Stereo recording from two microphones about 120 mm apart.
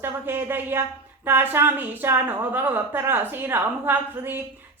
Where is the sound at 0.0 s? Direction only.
20° right (ahead or behind).